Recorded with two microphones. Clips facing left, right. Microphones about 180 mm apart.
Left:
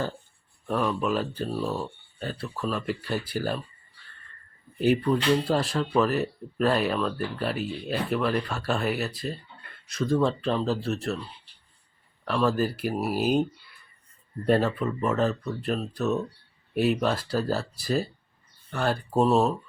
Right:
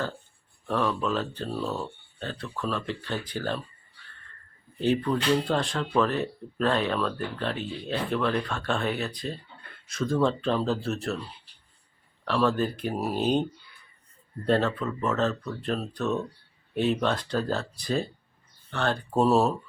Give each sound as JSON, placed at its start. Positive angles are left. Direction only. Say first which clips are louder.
{"t": 0.7, "sound": "speech", "louder": "left 1 dB", "side_deg": 10}
{"t": 4.8, "sound": "speech", "louder": "left 2 dB", "side_deg": 10}
{"t": 12.2, "sound": "speech", "louder": "even", "side_deg": 5}
{"t": 14.4, "sound": "speech", "louder": "left 1 dB", "side_deg": 10}